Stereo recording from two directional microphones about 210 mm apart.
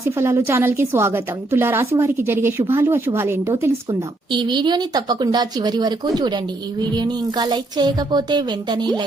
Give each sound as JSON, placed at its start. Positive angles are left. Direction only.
{"t": 0.2, "sound": "a woman's voice", "side_deg": -15}